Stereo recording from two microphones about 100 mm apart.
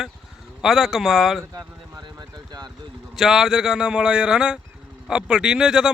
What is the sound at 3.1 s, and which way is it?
Speech, 5° right (ahead or behind).